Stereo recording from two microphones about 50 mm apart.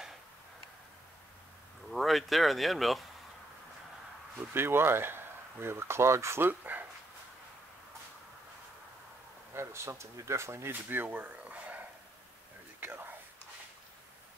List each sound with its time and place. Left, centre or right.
1.9 s speech: centre
4.6 s speech: right
6.6 s dog: right
9.5 s speech: right
10.7 s speech: right
12.8 s whispering: right